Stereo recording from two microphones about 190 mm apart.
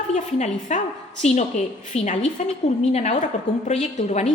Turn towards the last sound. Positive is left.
turn(degrees=35)  # may be behind; listen again after turning